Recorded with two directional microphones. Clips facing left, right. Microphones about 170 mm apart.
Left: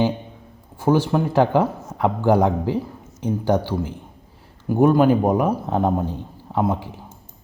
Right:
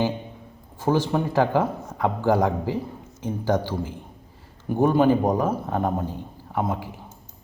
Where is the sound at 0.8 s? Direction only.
10° left (ahead or behind).